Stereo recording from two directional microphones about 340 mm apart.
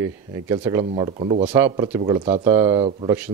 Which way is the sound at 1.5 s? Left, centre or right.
Centre.